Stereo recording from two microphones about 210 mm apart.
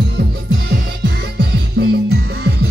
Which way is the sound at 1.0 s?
50° right (ahead or behind).